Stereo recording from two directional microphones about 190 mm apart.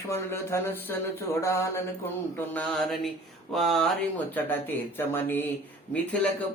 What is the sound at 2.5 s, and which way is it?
Speech, centre (ahead or behind).